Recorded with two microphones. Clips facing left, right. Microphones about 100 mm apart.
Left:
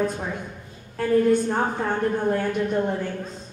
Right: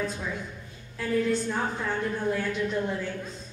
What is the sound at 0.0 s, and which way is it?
A woman's voice, 50° left (ahead or behind).